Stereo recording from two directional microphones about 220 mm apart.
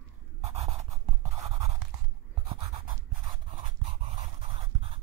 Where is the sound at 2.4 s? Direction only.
25° right (ahead or behind).